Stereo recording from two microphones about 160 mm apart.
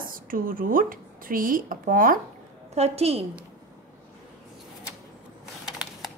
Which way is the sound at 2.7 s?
40° right (ahead or behind).